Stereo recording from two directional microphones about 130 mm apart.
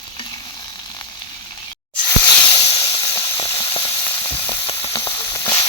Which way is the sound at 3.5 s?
45° left (ahead or behind).